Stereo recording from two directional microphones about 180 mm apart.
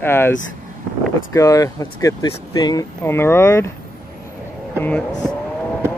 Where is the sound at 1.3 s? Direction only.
20° left (ahead or behind).